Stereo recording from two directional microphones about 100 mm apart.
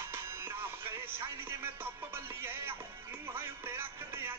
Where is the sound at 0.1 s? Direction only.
25° right (ahead or behind).